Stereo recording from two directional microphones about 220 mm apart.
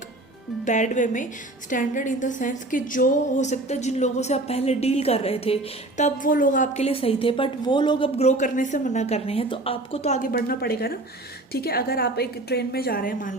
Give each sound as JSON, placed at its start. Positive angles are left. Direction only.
{"t": 0.6, "sound": "a woman's voice", "side_deg": 35}
{"t": 10.3, "sound": "a woman's voice", "side_deg": 45}